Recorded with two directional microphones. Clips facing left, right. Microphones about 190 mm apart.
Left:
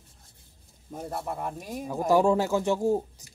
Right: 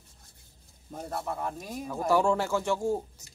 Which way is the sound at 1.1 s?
10° left (ahead or behind).